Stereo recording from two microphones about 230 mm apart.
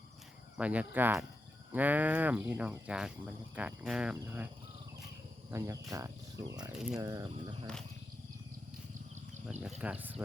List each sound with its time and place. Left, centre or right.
0.5 s speech: centre
5.5 s speech: centre
9.5 s speech: centre